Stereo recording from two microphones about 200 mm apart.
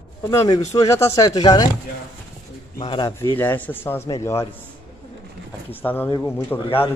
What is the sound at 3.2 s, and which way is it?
Speech, 10° left (ahead or behind).